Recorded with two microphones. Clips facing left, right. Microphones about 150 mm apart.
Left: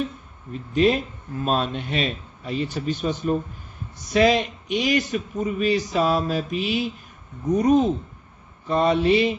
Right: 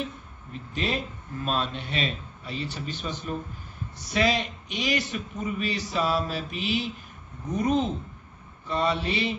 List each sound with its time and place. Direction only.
0.5 s speech: 45° left (ahead or behind)